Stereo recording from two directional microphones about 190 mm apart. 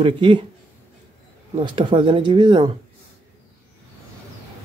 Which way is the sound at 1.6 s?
25° right (ahead or behind).